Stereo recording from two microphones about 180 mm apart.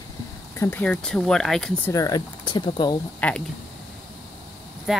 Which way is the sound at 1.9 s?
20° left (ahead or behind).